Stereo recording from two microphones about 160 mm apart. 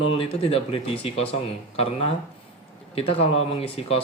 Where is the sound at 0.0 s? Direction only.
35° left (ahead or behind).